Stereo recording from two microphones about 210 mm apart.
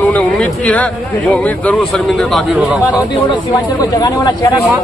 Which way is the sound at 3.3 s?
20° left (ahead or behind).